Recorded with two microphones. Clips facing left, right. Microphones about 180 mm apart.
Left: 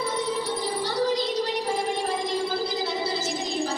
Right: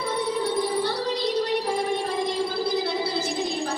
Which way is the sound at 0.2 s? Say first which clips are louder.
Right 3 dB; 60° right (ahead or behind).